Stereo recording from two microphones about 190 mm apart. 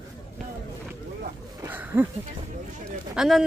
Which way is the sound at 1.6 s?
10° right (ahead or behind).